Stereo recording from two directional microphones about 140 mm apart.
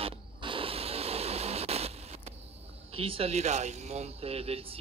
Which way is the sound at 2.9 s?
45° right (ahead or behind).